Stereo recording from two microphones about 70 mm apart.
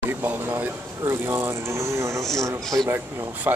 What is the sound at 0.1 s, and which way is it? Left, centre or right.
Speech, right.